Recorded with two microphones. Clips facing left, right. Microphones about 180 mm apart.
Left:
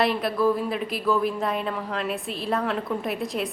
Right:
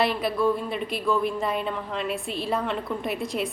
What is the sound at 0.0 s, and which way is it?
A woman's voice, centre (ahead or behind).